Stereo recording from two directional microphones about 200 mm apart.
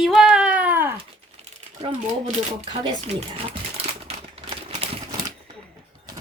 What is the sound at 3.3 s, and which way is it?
Typewriter, 30° right (ahead or behind).